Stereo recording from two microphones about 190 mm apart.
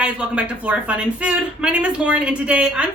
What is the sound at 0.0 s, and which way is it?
Speech, 5° right (ahead or behind).